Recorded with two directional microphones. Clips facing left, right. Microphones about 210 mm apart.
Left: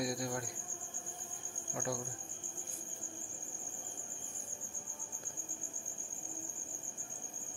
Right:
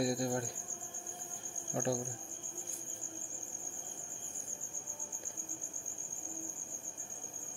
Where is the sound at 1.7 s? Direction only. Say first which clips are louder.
Right 5 dB; 25° right (ahead or behind).